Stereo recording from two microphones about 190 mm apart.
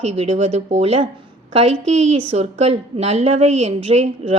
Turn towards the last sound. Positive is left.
turn(degrees=-30)  # may be behind; listen again after turning